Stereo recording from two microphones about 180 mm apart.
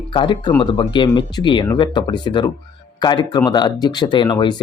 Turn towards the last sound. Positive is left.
turn(degrees=25)  # may be behind; listen again after turning